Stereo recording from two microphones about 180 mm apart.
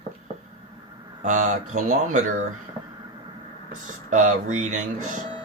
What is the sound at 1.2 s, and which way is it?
Speech, 45° right (ahead or behind).